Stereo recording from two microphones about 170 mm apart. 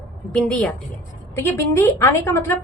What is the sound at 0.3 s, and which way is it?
A woman's voice, 5° left (ahead or behind).